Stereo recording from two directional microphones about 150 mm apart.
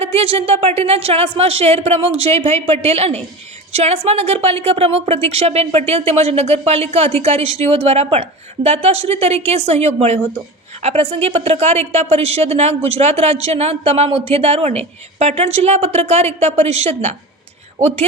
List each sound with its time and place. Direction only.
0.0 s a woman's voice: 40° right (ahead or behind)